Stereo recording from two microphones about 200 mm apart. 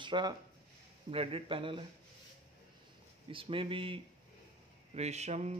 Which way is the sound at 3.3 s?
25° right (ahead or behind).